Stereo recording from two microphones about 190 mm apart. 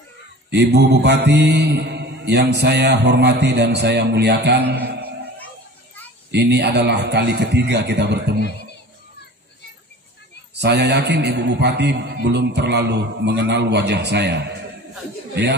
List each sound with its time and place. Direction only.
0.5 s mantra: 60° right (ahead or behind)
4.6 s a sound: 55° right (ahead or behind)
6.3 s mantra: 65° right (ahead or behind)
10.6 s mantra: 60° right (ahead or behind)